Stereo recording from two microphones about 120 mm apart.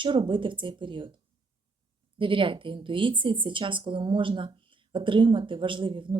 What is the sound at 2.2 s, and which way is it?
Speech, 45° right (ahead or behind).